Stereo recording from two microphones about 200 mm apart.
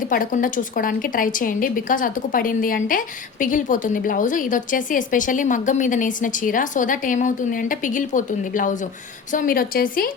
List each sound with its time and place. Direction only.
0.1 s a woman's voice: 45° left (ahead or behind)